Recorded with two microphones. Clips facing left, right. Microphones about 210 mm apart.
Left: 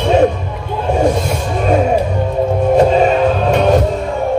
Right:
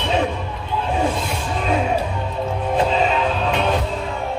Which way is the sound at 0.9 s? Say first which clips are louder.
Left 9 dB; 45° left (ahead or behind).